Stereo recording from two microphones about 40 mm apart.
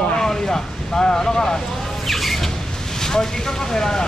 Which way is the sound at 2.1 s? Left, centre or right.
Centre.